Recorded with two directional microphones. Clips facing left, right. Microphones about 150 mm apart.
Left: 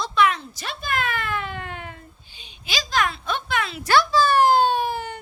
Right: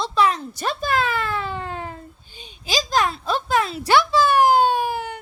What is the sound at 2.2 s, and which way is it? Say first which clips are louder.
A woman's voice: right 7 dB; 45° right (ahead or behind).